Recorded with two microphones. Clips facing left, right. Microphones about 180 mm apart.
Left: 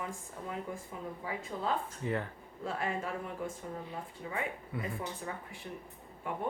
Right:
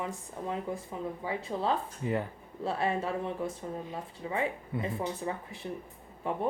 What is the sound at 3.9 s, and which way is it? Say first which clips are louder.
Speech: right 4 dB; 25° right (ahead or behind).